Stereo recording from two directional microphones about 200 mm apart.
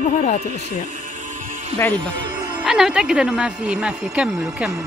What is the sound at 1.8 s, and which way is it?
Speech, 5° left (ahead or behind).